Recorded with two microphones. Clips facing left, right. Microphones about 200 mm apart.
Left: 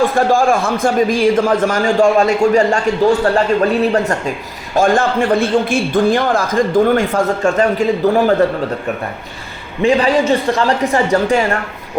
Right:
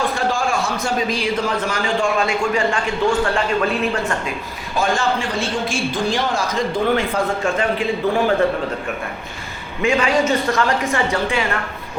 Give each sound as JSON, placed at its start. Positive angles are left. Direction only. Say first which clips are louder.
{"t": 0.0, "sound": "a man's voice", "louder": "left 8 dB", "side_deg": 50}
{"t": 4.7, "sound": "a man's voice", "louder": "left 6 dB", "side_deg": 50}
{"t": 9.8, "sound": "a man's voice", "louder": "left 5 dB", "side_deg": 35}